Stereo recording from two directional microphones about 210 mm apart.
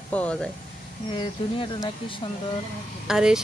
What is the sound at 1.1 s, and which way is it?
Speech, 25° left (ahead or behind).